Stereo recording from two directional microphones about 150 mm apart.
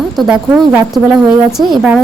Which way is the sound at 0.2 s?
5° right (ahead or behind).